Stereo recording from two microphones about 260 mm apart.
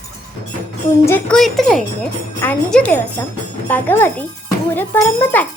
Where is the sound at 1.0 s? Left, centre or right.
Centre.